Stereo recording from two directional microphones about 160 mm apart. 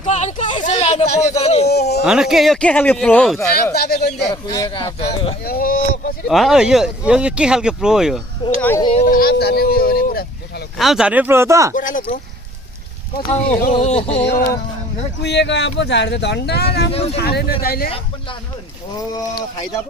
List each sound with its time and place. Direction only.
0.0 s a sound: 45° left (ahead or behind)
2.0 s speech: 5° right (ahead or behind)
3.5 s speech: 85° left
4.5 s speech: 25° left (ahead or behind)
5.5 s speech: 65° left (ahead or behind)
6.2 s speech: centre (ahead or behind)
8.4 s speech: 30° left (ahead or behind)
9.0 s speech: 70° left (ahead or behind)
10.8 s speech: centre (ahead or behind); by 11.7 s 20° right (ahead or behind)
11.7 s speech: 55° left (ahead or behind)
13.2 s a sound: 45° left (ahead or behind)
15.2 s speech: 90° left; by 17.9 s 65° left (ahead or behind)
18.9 s speech: 20° left (ahead or behind)